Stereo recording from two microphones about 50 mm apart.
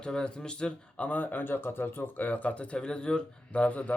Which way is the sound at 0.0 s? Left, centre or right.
Centre.